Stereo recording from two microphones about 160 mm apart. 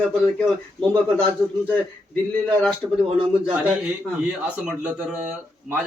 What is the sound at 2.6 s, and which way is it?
Speech, 5° left (ahead or behind).